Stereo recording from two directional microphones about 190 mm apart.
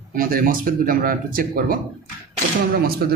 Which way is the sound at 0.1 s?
50° right (ahead or behind).